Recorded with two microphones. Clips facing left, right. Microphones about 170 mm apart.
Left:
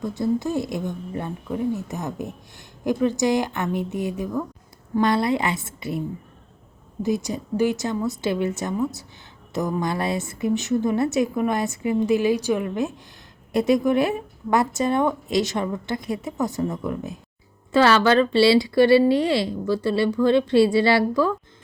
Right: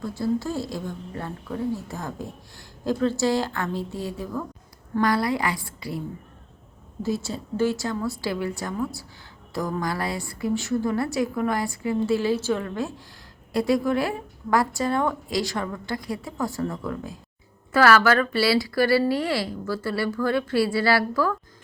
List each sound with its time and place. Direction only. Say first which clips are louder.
0.0 s a woman's voice: left 2 dB; 20° left (ahead or behind)
7.0 s a woman's voice: left 3 dB; 15° left (ahead or behind)